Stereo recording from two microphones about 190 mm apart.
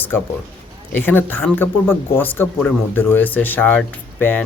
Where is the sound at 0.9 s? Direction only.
10° left (ahead or behind).